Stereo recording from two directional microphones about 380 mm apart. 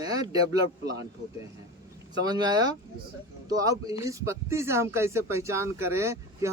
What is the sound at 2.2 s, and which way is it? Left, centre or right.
Speech, centre.